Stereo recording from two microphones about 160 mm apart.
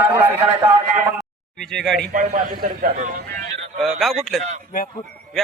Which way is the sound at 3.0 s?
50° right (ahead or behind).